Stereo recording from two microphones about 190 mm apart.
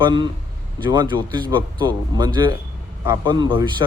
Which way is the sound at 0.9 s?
25° right (ahead or behind).